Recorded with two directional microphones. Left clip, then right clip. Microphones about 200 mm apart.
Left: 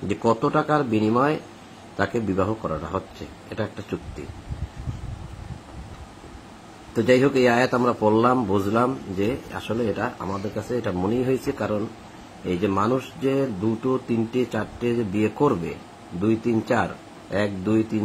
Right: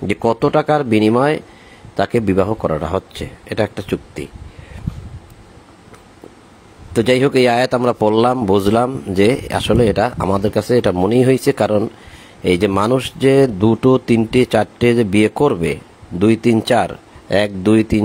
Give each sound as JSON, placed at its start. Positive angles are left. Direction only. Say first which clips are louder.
{"t": 0.1, "sound": "speech", "louder": "right 6 dB", "side_deg": -45}
{"t": 7.0, "sound": "speech", "louder": "right 5 dB", "side_deg": -50}